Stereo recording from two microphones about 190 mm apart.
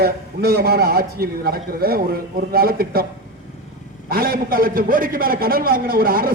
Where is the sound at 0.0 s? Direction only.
55° right (ahead or behind).